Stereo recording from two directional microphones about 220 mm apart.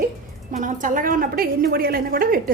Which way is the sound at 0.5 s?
35° right (ahead or behind).